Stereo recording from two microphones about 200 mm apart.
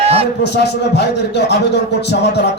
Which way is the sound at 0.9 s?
55° left (ahead or behind).